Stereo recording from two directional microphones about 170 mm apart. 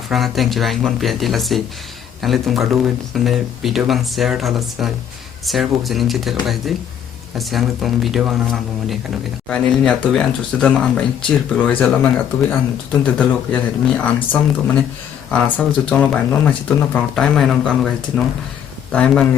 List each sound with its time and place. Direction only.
0.1 s speech: centre (ahead or behind)